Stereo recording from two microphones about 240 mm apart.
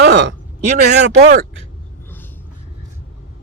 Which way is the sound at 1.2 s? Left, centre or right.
Right.